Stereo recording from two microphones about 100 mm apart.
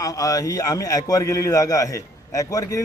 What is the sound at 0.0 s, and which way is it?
A man's voice, 35° left (ahead or behind).